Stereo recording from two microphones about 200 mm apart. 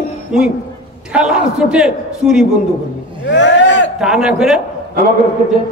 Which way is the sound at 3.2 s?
65° left (ahead or behind).